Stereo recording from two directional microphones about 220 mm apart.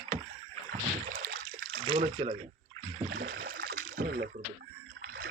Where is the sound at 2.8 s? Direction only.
30° right (ahead or behind).